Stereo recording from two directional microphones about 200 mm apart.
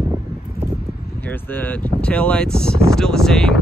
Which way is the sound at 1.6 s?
10° left (ahead or behind).